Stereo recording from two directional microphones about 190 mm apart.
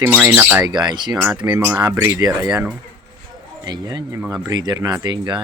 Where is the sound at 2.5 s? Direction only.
5° right (ahead or behind).